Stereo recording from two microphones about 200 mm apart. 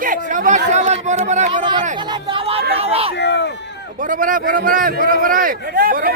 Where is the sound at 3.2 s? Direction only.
60° left (ahead or behind).